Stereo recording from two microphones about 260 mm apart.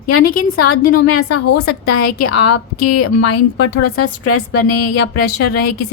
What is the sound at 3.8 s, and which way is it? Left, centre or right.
A woman's voice, left.